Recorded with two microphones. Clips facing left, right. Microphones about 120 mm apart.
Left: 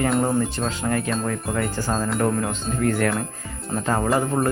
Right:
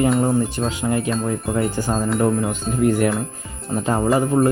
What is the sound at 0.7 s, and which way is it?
Speech, 15° right (ahead or behind).